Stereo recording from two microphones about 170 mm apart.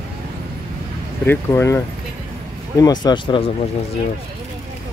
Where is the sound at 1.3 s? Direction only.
15° left (ahead or behind).